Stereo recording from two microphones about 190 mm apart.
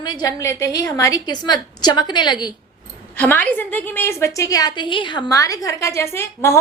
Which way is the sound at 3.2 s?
10° left (ahead or behind).